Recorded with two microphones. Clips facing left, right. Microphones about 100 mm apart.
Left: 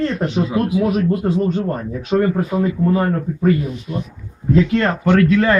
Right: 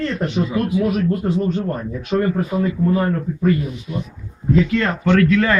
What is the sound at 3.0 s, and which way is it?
Speech, 40° left (ahead or behind).